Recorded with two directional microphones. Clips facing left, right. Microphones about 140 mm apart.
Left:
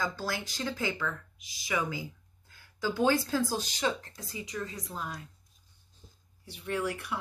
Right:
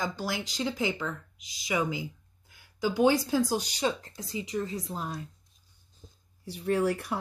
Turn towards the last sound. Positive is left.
turn(degrees=-40)  # may be behind; listen again after turning